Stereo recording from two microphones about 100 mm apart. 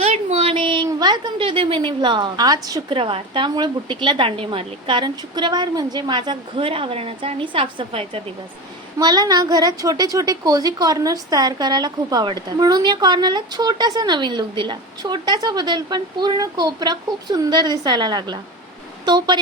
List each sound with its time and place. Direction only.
0.0 s a sound: 85° right; by 0.9 s 55° right (ahead or behind)
0.9 s a woman's voice: 40° right (ahead or behind)
2.9 s a woman's voice: 65° right (ahead or behind)
4.3 s a woman's voice: 65° right (ahead or behind)
9.0 s a woman's voice: 45° right (ahead or behind)